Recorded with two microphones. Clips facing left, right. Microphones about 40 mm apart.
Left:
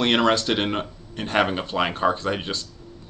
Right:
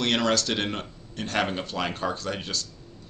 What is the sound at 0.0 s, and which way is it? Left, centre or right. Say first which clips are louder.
Speech: left 4 dB; left.